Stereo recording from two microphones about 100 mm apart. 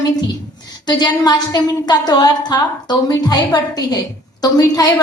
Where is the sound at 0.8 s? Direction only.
40° left (ahead or behind).